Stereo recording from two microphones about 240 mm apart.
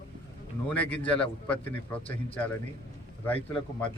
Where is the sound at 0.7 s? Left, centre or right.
Centre.